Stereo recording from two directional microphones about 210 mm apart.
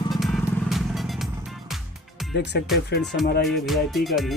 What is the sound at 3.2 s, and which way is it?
Music, 50° left (ahead or behind).